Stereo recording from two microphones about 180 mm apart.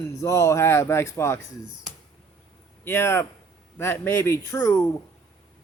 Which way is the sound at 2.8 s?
15° left (ahead or behind).